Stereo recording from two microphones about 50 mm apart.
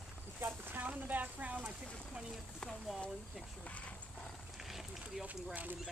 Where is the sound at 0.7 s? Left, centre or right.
Right.